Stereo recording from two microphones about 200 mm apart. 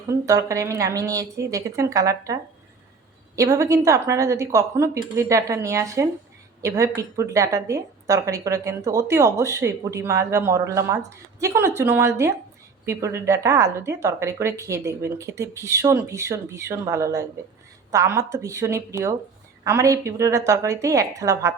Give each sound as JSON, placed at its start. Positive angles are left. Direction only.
{"t": 0.1, "sound": "speech", "side_deg": -15}